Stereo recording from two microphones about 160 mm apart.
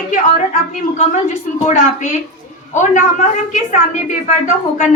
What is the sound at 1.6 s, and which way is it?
A woman's voice, 50° left (ahead or behind).